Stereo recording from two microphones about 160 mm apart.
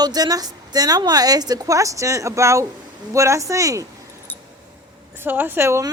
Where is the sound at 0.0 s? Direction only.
25° right (ahead or behind).